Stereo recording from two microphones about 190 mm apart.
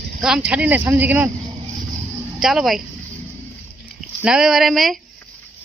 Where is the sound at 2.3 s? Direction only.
5° right (ahead or behind).